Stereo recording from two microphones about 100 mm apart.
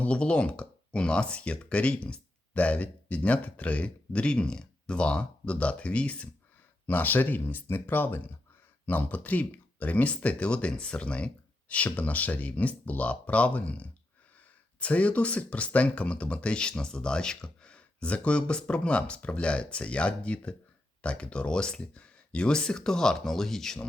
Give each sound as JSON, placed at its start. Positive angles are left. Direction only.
{"t": 0.0, "sound": "speech", "side_deg": 10}